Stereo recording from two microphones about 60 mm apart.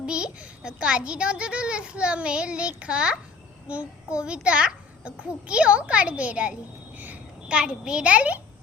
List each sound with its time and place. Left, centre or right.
0.0 s a child's voice: centre
7.5 s a child's voice: centre